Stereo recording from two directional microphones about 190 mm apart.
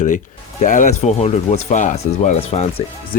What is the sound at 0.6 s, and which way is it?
Speech, 40° left (ahead or behind).